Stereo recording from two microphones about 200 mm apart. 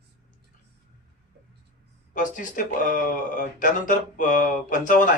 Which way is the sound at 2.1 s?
40° left (ahead or behind).